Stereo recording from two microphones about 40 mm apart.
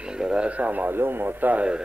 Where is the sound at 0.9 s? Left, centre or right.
Right.